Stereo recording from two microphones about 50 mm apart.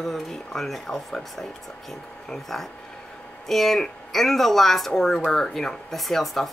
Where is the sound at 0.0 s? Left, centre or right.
Centre.